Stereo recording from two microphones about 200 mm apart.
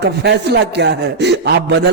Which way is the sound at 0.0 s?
55° right (ahead or behind).